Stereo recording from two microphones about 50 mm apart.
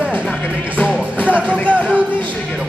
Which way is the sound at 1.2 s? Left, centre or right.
Right.